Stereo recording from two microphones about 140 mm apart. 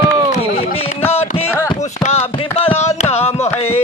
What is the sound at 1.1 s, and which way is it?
Carnatic music, 45° left (ahead or behind).